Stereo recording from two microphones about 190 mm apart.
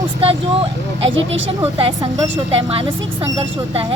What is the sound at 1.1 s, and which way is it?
Speech, 85° right.